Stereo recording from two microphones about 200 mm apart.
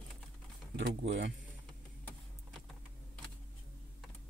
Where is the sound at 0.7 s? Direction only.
65° right (ahead or behind).